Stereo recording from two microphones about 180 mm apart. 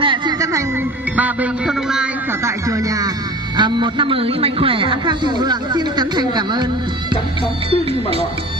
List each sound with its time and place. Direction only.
0.0 s a sound: 25° right (ahead or behind)
1.1 s music: 10° right (ahead or behind)
2.4 s a man's voice: 20° right (ahead or behind)